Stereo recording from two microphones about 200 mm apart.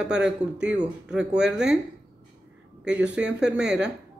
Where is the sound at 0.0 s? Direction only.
5° right (ahead or behind).